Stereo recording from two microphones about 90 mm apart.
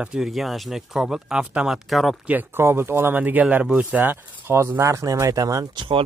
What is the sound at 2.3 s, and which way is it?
Speech, 25° right (ahead or behind).